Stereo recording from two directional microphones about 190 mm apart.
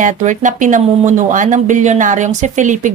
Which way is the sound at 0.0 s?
40° right (ahead or behind).